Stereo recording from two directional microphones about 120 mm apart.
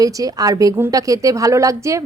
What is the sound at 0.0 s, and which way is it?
A woman's voice, 30° right (ahead or behind).